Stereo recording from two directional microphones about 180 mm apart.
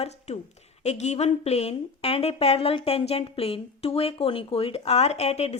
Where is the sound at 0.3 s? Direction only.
40° left (ahead or behind).